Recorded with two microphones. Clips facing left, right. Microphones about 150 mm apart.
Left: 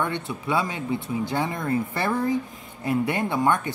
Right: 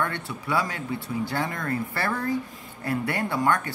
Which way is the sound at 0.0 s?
20° left (ahead or behind).